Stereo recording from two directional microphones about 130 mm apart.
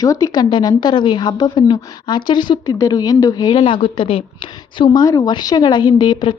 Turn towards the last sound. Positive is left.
turn(degrees=35)  # may be behind; listen again after turning